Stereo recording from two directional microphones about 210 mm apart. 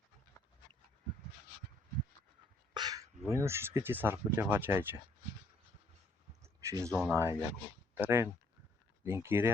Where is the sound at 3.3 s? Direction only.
10° right (ahead or behind).